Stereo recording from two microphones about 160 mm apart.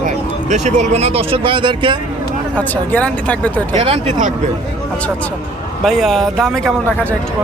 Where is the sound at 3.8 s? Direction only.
35° right (ahead or behind).